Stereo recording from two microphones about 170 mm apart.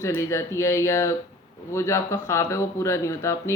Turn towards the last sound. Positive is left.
turn(degrees=15)  # may be behind; listen again after turning